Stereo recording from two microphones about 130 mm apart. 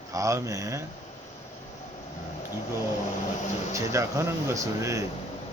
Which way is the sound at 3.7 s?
20° right (ahead or behind).